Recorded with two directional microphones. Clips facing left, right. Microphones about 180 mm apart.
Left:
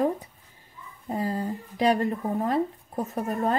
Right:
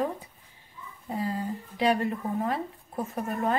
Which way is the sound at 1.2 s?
40° left (ahead or behind).